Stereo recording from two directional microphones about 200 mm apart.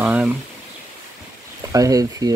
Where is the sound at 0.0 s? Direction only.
5° right (ahead or behind).